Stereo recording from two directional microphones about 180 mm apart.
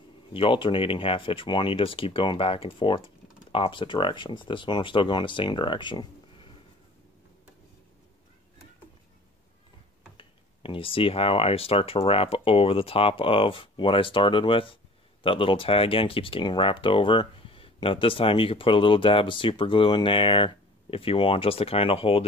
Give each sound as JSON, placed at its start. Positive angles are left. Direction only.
{"t": 0.3, "sound": "speech", "side_deg": 30}
{"t": 10.1, "sound": "speech", "side_deg": 30}